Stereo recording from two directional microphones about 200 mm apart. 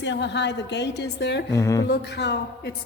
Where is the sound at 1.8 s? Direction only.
55° left (ahead or behind).